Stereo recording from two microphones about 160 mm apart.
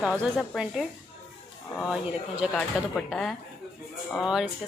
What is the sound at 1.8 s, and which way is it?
Speech, 5° right (ahead or behind).